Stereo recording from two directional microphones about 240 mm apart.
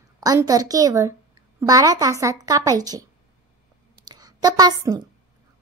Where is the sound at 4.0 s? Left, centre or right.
Centre.